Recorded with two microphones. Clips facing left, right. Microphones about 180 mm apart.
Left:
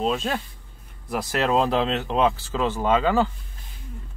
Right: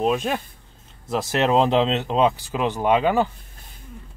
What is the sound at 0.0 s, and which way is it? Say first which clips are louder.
Speech: right 3 dB; 15° right (ahead or behind).